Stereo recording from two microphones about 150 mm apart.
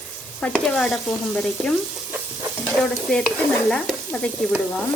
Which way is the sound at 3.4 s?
5° left (ahead or behind).